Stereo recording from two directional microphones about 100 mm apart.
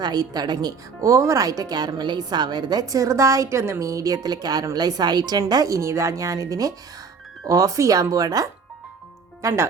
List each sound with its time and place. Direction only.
0.0 s speech: 40° right (ahead or behind)
9.4 s speech: 30° right (ahead or behind)